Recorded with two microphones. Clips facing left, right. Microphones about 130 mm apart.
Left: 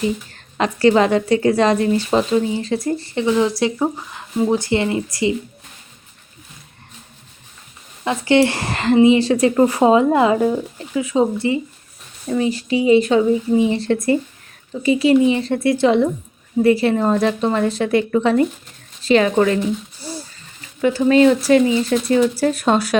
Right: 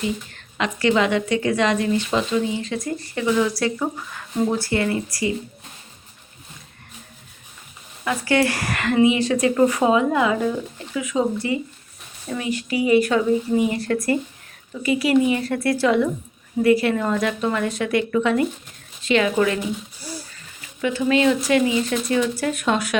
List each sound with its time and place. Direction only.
0.3 s a woman's voice: 40° left (ahead or behind); by 5.3 s 25° left (ahead or behind)
8.0 s a woman's voice: 25° left (ahead or behind)
20.0 s a sound: 25° left (ahead or behind)
20.8 s a woman's voice: 40° left (ahead or behind)